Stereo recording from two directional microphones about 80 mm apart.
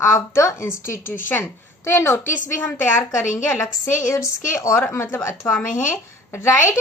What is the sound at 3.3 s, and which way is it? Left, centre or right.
A woman's voice, left.